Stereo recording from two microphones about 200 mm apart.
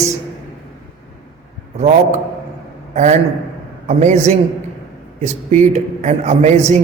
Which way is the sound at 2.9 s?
35° right (ahead or behind).